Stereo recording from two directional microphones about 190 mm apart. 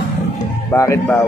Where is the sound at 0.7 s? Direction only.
15° left (ahead or behind).